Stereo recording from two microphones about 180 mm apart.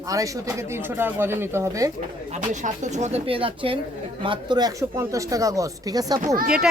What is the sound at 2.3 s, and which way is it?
Speech, 45° right (ahead or behind).